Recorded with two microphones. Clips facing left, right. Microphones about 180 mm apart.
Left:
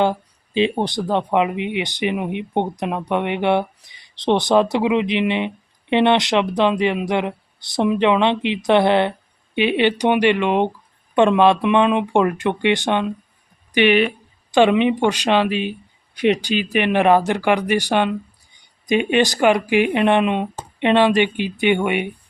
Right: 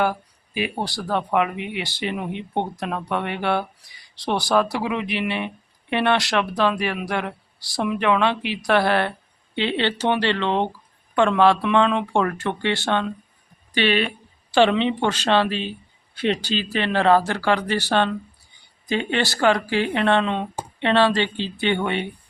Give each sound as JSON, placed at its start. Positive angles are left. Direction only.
{"t": 0.0, "sound": "speech", "side_deg": 25}